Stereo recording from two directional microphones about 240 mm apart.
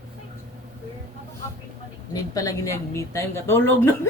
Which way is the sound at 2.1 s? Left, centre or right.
Centre.